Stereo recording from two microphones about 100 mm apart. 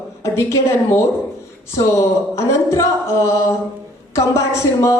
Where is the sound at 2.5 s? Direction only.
30° left (ahead or behind).